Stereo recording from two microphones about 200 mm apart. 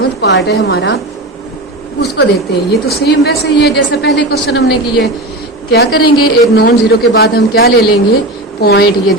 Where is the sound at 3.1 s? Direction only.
55° left (ahead or behind).